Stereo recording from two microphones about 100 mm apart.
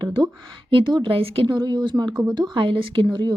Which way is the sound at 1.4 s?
45° right (ahead or behind).